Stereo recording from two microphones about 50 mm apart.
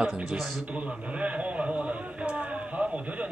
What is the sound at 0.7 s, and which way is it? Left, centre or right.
A man's voice, right.